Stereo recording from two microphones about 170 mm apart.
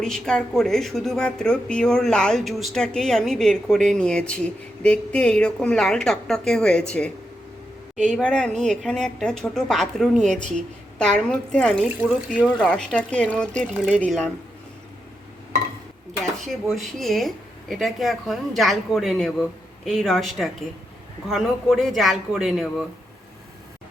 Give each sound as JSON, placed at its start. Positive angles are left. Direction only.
{"t": 0.0, "sound": "a woman's voice", "side_deg": 5}
{"t": 7.9, "sound": "a woman's voice", "side_deg": 5}
{"t": 16.2, "sound": "a woman's voice", "side_deg": 0}